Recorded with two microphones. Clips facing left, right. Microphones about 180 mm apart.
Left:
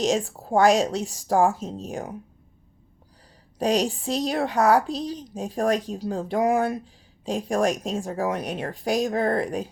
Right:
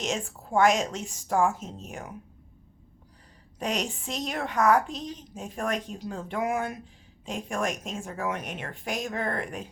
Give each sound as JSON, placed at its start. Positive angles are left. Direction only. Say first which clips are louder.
{"t": 0.0, "sound": "a woman's voice", "louder": "left 8 dB", "side_deg": 35}
{"t": 3.6, "sound": "a woman's voice", "louder": "left 8 dB", "side_deg": 35}